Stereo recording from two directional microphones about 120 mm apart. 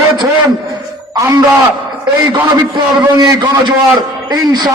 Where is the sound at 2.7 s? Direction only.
35° right (ahead or behind).